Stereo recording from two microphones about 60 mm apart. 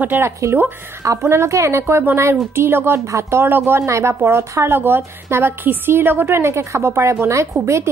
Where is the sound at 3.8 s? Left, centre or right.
Right.